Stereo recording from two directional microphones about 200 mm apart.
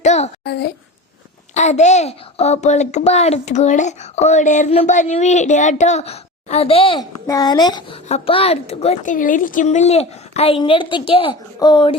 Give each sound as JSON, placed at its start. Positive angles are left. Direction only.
{"t": 0.0, "sound": "a sound", "side_deg": 35}
{"t": 0.4, "sound": "a child's voice", "side_deg": 55}
{"t": 1.5, "sound": "speech", "side_deg": 35}